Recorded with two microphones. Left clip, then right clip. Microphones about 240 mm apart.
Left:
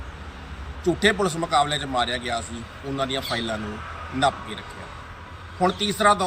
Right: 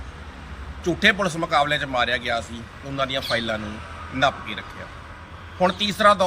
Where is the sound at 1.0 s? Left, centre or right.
Right.